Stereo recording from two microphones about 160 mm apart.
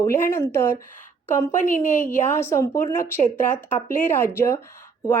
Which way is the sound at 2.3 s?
15° left (ahead or behind).